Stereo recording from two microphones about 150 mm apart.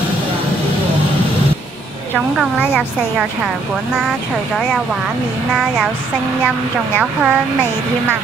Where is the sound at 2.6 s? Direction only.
15° left (ahead or behind).